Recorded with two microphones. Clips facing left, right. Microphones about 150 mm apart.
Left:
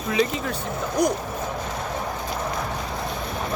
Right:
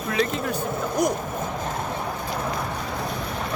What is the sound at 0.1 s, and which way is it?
Speech, centre (ahead or behind).